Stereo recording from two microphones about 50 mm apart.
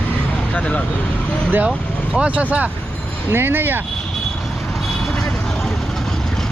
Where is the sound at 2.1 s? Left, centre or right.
Right.